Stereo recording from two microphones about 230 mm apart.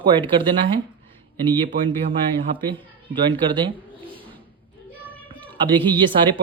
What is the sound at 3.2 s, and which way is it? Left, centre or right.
Speech, right.